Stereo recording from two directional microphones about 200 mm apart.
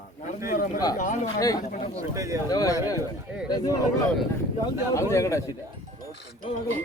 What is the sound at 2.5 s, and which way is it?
A man's voice, 20° left (ahead or behind).